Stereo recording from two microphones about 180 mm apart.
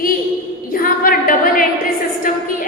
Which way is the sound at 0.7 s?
50° left (ahead or behind).